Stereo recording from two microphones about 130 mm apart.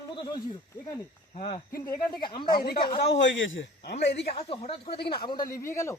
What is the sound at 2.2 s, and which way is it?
Speech, 35° left (ahead or behind).